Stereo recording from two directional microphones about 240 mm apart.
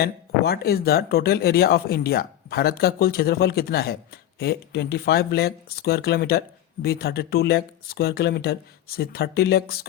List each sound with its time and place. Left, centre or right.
0.0 s speech: left